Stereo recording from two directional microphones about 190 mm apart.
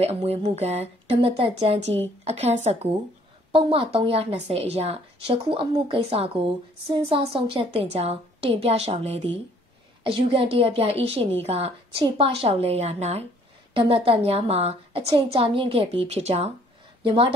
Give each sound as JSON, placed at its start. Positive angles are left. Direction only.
{"t": 0.0, "sound": "a woman's voice", "side_deg": -35}